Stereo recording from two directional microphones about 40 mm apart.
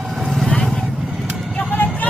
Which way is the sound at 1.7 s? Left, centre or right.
Left.